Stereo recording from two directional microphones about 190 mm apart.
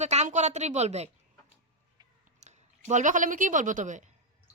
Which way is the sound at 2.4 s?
40° right (ahead or behind).